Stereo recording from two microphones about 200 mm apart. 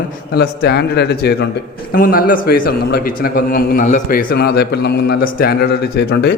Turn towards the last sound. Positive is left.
turn(degrees=55)  # may be behind; listen again after turning